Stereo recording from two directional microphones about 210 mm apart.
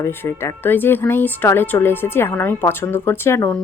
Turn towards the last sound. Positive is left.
turn(degrees=15)  # may be behind; listen again after turning